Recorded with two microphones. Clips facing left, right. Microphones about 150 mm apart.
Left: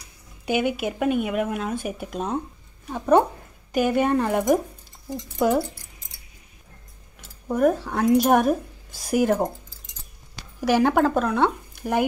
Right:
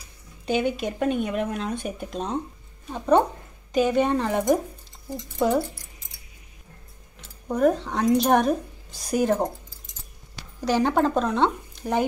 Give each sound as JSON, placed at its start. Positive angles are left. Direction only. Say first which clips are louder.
{"t": 0.5, "sound": "a woman's voice", "louder": "left 1 dB", "side_deg": 10}
{"t": 7.4, "sound": "a woman's voice", "louder": "left 1 dB", "side_deg": 5}
{"t": 10.6, "sound": "speech", "louder": "left 2 dB", "side_deg": 10}